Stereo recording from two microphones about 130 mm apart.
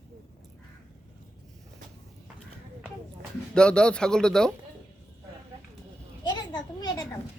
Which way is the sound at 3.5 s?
5° left (ahead or behind).